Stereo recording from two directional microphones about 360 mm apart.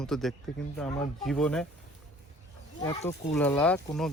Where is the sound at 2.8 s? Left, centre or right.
Centre.